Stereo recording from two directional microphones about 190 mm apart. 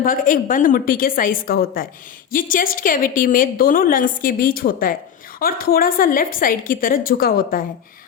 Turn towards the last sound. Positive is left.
turn(degrees=50)  # may be behind; listen again after turning